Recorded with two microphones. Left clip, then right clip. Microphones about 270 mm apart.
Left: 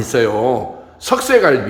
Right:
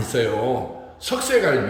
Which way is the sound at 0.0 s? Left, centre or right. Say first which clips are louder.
Left 7 dB; centre.